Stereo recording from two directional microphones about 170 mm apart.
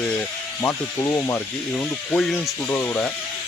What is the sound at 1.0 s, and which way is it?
Speech, 20° left (ahead or behind).